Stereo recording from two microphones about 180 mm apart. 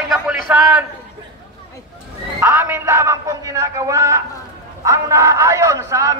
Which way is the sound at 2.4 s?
15° right (ahead or behind).